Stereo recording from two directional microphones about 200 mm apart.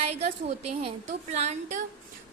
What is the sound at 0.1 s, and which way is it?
A woman's voice, 30° right (ahead or behind).